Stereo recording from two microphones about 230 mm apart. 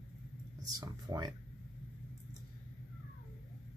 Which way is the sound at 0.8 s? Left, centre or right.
Centre.